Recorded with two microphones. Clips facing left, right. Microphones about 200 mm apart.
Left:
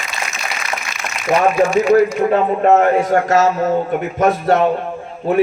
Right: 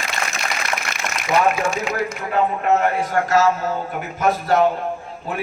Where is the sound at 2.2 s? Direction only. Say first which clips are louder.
Left 7 dB; 40° left (ahead or behind).